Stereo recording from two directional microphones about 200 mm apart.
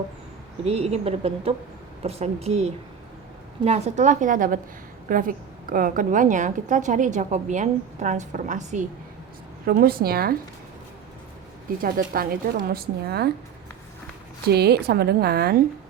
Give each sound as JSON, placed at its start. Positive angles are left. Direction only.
{"t": 0.6, "sound": "a woman's voice", "side_deg": -30}
{"t": 9.6, "sound": "a woman's voice", "side_deg": -50}
{"t": 11.8, "sound": "a woman's voice", "side_deg": -45}
{"t": 14.4, "sound": "a woman's voice", "side_deg": -55}